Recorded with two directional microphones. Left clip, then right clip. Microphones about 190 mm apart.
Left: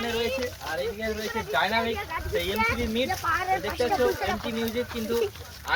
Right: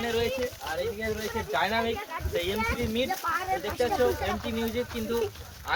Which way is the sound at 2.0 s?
35° left (ahead or behind).